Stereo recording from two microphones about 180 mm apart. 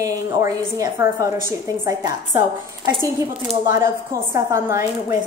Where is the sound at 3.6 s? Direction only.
20° right (ahead or behind).